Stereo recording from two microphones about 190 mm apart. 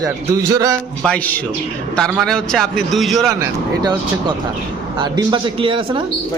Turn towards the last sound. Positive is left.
turn(degrees=-25)  # may be behind; listen again after turning